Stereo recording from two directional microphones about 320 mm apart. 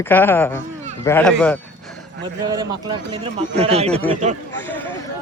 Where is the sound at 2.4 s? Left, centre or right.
Centre.